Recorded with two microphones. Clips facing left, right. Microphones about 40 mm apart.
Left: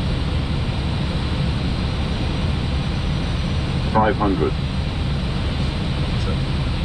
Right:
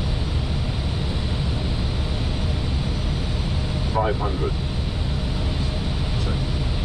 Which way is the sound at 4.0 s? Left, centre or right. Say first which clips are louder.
Left 6 dB; left.